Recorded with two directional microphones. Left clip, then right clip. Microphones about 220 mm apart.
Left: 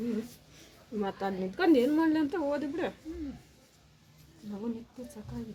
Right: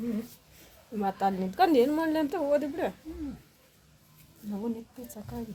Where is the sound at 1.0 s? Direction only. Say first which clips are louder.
Right 6 dB; 40° right (ahead or behind).